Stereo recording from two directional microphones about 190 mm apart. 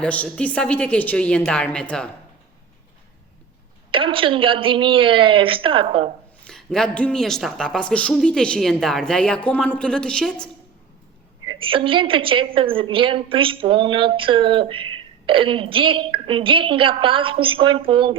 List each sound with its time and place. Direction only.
0.0 s a woman's voice: 5° left (ahead or behind)
3.9 s a woman's voice: 25° right (ahead or behind)
6.4 s a woman's voice: 5° left (ahead or behind)
11.4 s a woman's voice: 30° right (ahead or behind)